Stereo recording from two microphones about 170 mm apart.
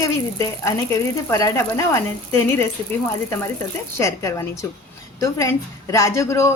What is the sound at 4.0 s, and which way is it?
Speech, 15° left (ahead or behind).